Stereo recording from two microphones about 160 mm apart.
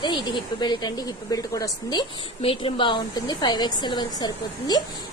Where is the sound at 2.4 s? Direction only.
35° left (ahead or behind).